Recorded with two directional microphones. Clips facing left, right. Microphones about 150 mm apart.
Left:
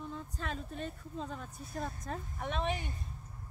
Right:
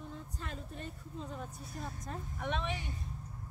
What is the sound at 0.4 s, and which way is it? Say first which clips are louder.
Speech: left 6 dB; 90° left.